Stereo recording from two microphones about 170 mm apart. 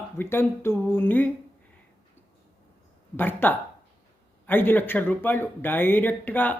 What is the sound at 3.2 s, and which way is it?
Speech, 10° left (ahead or behind).